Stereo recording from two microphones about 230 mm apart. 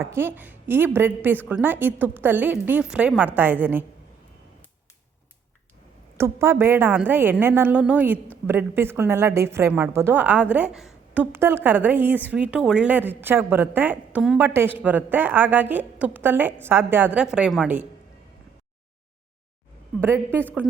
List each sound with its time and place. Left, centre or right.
0.0 s a woman's voice: centre
6.1 s a woman's voice: centre
20.0 s a woman's voice: centre